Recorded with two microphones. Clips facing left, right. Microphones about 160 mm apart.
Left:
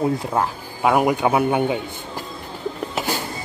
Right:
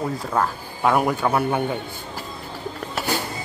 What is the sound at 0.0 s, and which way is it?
A man's voice, 20° left (ahead or behind).